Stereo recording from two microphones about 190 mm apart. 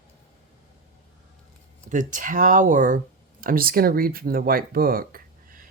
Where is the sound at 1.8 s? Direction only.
40° right (ahead or behind).